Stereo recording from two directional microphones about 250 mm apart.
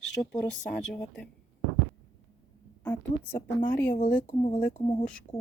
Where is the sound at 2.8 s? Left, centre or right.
Centre.